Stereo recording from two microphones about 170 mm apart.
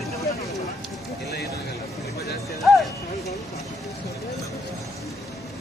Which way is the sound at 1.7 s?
20° left (ahead or behind).